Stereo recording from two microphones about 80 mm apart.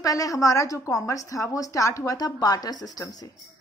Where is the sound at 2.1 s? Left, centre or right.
Left.